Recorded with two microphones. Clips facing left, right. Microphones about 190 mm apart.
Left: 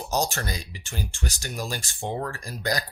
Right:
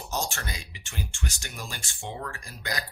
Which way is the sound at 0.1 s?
40° left (ahead or behind).